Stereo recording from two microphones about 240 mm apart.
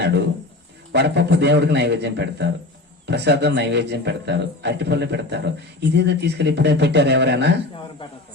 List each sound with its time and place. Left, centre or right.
0.0 s a man's voice: right